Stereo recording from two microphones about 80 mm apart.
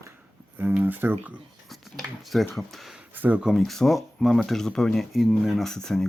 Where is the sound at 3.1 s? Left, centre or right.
Right.